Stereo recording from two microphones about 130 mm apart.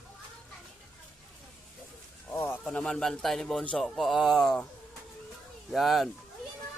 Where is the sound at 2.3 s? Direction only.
15° left (ahead or behind).